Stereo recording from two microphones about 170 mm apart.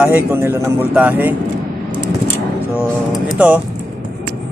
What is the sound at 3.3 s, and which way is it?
Speech, 10° right (ahead or behind).